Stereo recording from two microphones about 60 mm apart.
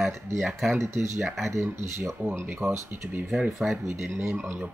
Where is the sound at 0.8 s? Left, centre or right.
Right.